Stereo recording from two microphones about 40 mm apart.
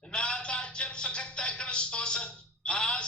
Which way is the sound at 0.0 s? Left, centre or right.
Left.